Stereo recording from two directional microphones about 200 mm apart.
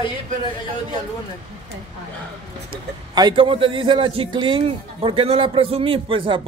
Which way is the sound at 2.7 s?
25° right (ahead or behind).